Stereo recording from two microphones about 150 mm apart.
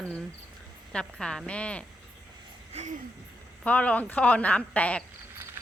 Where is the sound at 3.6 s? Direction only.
10° left (ahead or behind).